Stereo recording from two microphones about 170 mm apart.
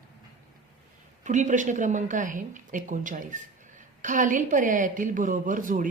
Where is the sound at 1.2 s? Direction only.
45° right (ahead or behind).